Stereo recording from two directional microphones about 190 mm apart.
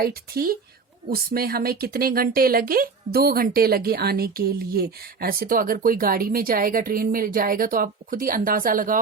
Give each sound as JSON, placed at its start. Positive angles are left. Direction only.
{"t": 0.0, "sound": "speech", "side_deg": -50}